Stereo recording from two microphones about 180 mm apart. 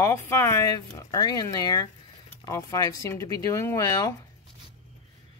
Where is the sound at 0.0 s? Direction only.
15° left (ahead or behind).